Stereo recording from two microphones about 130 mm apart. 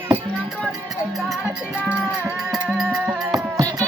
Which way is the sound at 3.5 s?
25° right (ahead or behind).